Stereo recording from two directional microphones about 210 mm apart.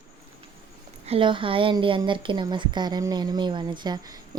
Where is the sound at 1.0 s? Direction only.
25° right (ahead or behind).